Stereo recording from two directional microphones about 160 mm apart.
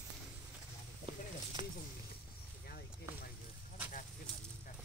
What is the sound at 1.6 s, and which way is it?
Snake, 30° right (ahead or behind).